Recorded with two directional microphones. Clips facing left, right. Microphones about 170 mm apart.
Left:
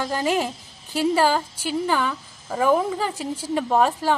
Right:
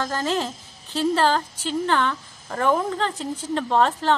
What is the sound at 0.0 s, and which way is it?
A woman's voice, 15° left (ahead or behind).